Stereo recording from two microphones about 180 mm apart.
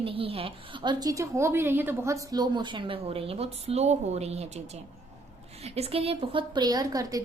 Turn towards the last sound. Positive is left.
turn(degrees=-20)  # may be behind; listen again after turning